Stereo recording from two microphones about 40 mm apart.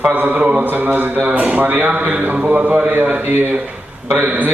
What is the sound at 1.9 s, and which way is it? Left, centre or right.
A man's voice, right.